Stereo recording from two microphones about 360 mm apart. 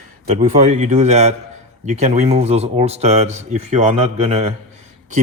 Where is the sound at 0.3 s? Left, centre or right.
Centre.